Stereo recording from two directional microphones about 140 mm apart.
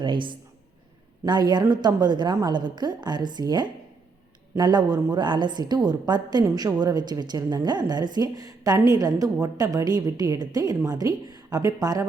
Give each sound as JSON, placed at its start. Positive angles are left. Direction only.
{"t": 0.0, "sound": "a woman's voice", "side_deg": -35}